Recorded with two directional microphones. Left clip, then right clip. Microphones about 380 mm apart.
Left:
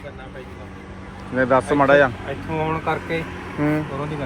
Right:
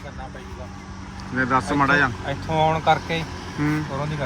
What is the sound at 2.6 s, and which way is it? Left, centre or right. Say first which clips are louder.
Speech: right 5 dB; right.